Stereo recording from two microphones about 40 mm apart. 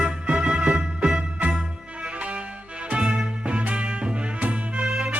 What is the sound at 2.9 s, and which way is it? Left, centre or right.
Music, right.